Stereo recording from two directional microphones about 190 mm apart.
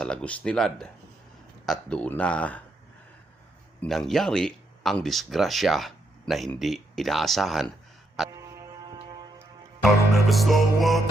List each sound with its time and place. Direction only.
0.0 s music: 5° left (ahead or behind)
1.6 s speech: 5° left (ahead or behind)
3.8 s speech: centre (ahead or behind)
6.6 s music: centre (ahead or behind)
8.3 s music: 15° right (ahead or behind)
9.8 s music: centre (ahead or behind)